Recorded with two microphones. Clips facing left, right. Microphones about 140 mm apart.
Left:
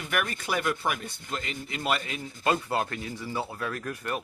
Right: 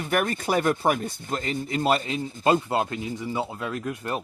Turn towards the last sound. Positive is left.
turn(degrees=-25)  # may be behind; listen again after turning